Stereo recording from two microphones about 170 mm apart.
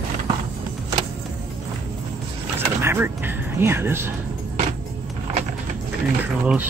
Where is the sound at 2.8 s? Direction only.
10° right (ahead or behind).